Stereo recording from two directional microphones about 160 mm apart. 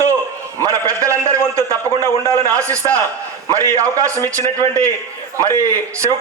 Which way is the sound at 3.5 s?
20° right (ahead or behind).